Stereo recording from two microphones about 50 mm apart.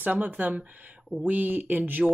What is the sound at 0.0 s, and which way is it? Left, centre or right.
Speech, right.